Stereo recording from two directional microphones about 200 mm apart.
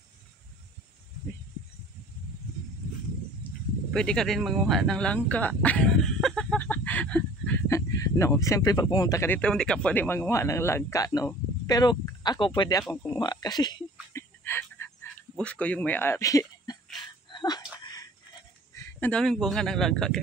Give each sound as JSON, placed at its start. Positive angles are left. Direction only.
{"t": 3.9, "sound": "speech", "side_deg": 5}
{"t": 12.8, "sound": "speech", "side_deg": 5}
{"t": 13.2, "sound": "speech", "side_deg": 20}
{"t": 14.1, "sound": "a sound", "side_deg": 10}
{"t": 15.3, "sound": "speech", "side_deg": 5}
{"t": 17.3, "sound": "a sound", "side_deg": 20}
{"t": 18.8, "sound": "a man's voice", "side_deg": 10}